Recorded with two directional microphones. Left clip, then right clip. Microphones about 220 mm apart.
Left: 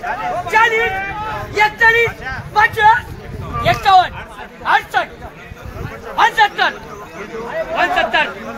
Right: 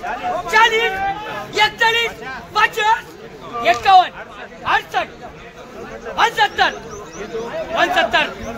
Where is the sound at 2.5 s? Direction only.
45° right (ahead or behind).